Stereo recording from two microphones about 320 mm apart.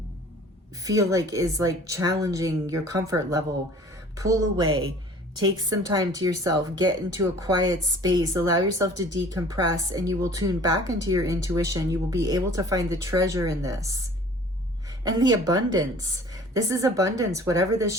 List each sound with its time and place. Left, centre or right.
0.8 s a woman's voice: centre